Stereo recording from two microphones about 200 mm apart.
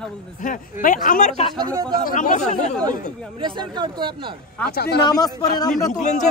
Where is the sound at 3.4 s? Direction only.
20° right (ahead or behind).